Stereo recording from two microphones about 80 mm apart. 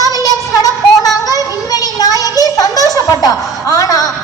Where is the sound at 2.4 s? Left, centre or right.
Left.